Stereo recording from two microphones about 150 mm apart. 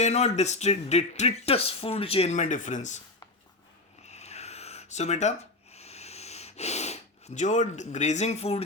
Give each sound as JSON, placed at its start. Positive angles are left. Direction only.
{"t": 0.0, "sound": "speech", "side_deg": 45}
{"t": 4.1, "sound": "a sound", "side_deg": 45}
{"t": 5.7, "sound": "wheeze", "side_deg": 45}